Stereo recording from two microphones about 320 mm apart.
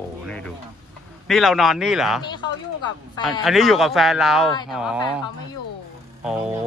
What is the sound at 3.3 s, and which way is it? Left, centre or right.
Speech, centre.